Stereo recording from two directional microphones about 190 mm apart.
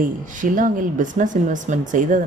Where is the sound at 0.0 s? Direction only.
45° right (ahead or behind).